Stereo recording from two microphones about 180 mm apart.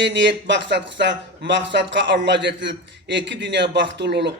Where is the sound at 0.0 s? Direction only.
80° right.